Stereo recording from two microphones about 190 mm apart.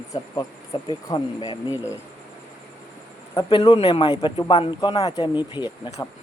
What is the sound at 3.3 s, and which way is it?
Speech, 25° left (ahead or behind).